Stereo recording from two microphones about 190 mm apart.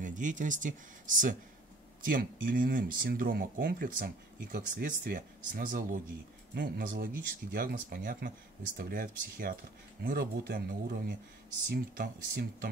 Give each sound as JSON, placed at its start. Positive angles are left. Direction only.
{"t": 0.0, "sound": "speech", "side_deg": -40}